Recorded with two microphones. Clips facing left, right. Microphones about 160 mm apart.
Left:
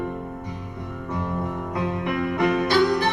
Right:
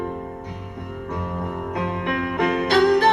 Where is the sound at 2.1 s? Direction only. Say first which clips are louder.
Even; 65° right (ahead or behind).